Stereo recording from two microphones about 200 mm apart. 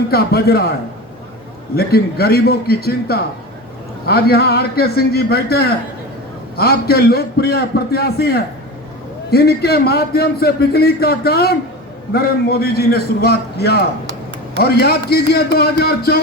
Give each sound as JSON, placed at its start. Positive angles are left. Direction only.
{"t": 0.1, "sound": "a man's voice", "side_deg": 50}
{"t": 1.7, "sound": "a man's voice", "side_deg": 50}